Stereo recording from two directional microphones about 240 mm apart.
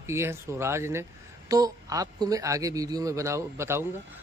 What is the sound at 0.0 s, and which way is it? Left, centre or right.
A man's voice, centre.